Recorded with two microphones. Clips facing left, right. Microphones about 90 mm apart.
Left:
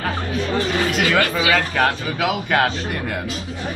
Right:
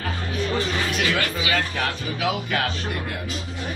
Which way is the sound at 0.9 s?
70° left (ahead or behind).